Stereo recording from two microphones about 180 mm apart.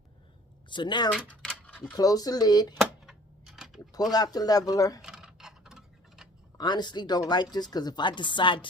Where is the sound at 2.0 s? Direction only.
20° left (ahead or behind).